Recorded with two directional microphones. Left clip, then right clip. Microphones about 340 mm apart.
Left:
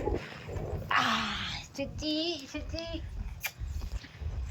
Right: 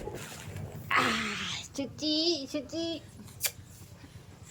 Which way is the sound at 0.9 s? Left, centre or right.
Centre.